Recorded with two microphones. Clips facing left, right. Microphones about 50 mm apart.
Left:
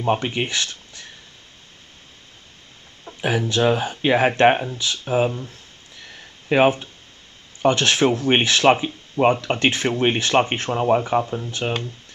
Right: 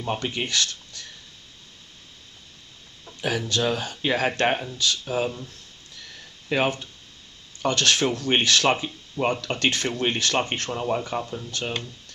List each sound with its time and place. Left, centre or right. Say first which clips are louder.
0.0 s speech: left 6 dB; left
3.1 s speech: left 4 dB; left